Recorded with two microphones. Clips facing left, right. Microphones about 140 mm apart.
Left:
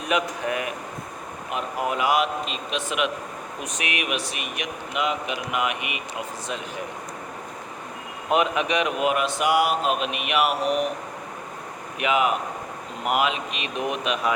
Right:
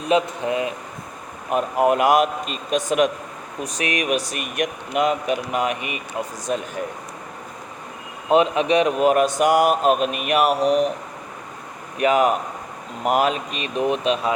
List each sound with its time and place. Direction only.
0.0 s speech: 25° right (ahead or behind)
1.5 s a man's voice: 50° right (ahead or behind)
8.3 s speech: 30° right (ahead or behind)
11.9 s speech: 40° right (ahead or behind)